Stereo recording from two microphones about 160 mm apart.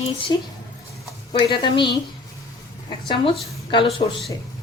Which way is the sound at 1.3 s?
30° left (ahead or behind).